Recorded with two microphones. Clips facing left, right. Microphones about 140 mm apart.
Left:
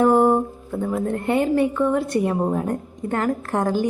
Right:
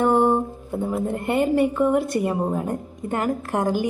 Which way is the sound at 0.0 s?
Centre (ahead or behind).